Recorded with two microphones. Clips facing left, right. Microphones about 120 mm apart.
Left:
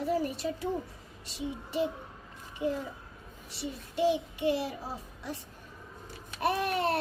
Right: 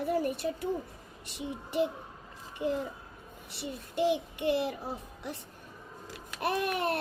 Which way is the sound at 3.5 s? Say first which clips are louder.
Left 1 dB; 60° right (ahead or behind).